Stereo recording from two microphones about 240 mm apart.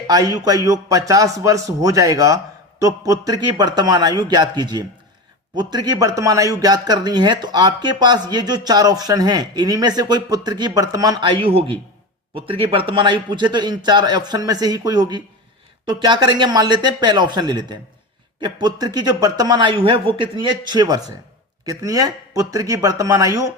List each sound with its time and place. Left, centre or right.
0.1 s speech: centre